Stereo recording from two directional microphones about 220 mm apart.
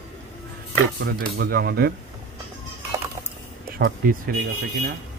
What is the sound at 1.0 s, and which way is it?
Speech, 45° right (ahead or behind).